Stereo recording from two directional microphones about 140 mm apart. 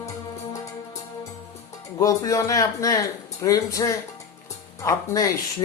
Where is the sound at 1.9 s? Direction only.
25° left (ahead or behind).